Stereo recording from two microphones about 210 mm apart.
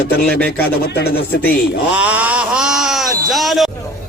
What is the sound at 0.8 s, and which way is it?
Speech, 50° left (ahead or behind).